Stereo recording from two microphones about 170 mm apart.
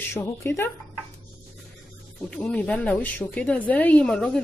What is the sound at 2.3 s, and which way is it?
Speech, 5° left (ahead or behind).